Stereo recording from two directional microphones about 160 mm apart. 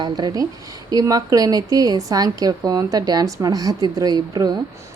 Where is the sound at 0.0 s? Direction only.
25° right (ahead or behind).